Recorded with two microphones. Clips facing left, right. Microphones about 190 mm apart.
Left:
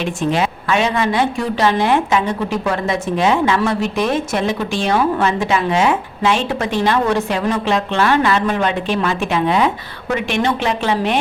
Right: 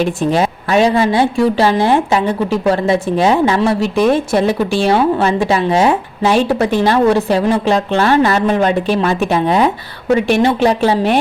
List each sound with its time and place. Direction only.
0.0 s speech: 40° right (ahead or behind)